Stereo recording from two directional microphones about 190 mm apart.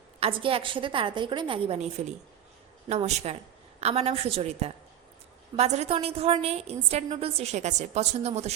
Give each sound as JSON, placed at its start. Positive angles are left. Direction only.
{"t": 0.2, "sound": "a woman's voice", "side_deg": -30}